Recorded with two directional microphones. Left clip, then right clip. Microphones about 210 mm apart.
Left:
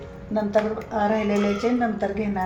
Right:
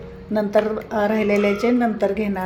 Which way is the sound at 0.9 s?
55° right (ahead or behind).